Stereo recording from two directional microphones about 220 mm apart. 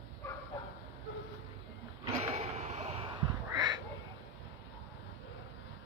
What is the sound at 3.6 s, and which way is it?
Duck, 20° right (ahead or behind).